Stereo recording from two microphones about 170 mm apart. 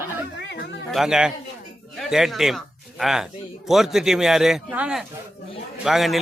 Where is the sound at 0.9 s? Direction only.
5° right (ahead or behind).